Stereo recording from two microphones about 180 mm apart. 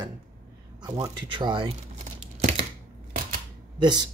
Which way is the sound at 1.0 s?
25° right (ahead or behind).